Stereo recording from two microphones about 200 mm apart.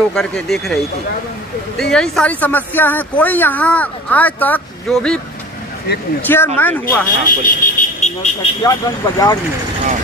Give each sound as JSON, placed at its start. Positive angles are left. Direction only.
{"t": 0.1, "sound": "speech", "side_deg": 5}
{"t": 1.8, "sound": "speech", "side_deg": 5}
{"t": 5.9, "sound": "speech", "side_deg": 55}
{"t": 6.2, "sound": "speech", "side_deg": 10}
{"t": 7.2, "sound": "a sound", "side_deg": 40}
{"t": 8.6, "sound": "speech", "side_deg": 15}